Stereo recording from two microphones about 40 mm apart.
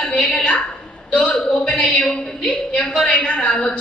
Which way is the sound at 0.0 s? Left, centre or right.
Centre.